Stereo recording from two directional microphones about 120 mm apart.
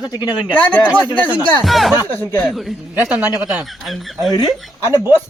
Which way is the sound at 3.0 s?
15° right (ahead or behind).